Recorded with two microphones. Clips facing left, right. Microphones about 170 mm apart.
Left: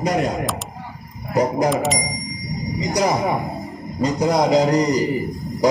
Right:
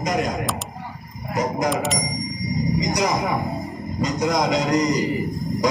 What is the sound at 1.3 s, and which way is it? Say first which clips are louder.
Speech: left 5 dB; 30° left (ahead or behind).